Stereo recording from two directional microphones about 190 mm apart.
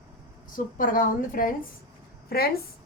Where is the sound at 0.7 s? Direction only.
45° left (ahead or behind).